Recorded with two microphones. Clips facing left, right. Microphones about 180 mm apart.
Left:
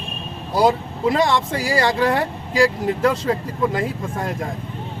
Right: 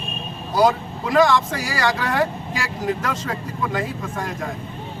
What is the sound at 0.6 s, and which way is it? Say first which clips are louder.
Speech: left 1 dB; 25° left (ahead or behind).